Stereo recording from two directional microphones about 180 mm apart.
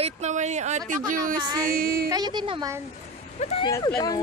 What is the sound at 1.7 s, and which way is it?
Speech, 55° right (ahead or behind).